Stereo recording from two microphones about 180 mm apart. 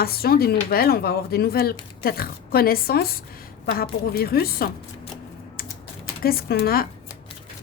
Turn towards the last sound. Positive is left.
turn(degrees=55)  # may be behind; listen again after turning